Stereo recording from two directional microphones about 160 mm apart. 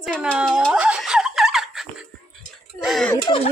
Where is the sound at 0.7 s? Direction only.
5° right (ahead or behind).